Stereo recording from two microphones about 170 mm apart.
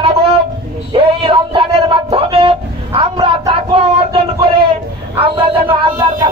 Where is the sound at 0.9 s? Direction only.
30° right (ahead or behind).